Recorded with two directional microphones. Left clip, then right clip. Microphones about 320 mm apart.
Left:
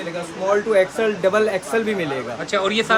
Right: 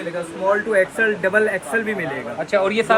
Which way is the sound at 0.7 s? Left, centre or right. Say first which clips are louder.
Even; centre.